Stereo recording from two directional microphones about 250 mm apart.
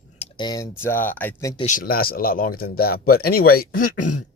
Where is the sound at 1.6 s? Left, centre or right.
Left.